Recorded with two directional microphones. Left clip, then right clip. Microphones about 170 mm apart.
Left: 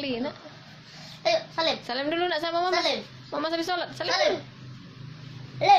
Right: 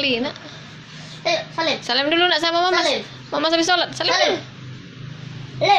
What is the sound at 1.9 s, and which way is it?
A woman's voice, 10° left (ahead or behind).